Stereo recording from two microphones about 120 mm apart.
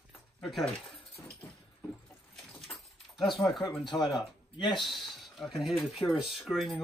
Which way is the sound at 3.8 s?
40° left (ahead or behind).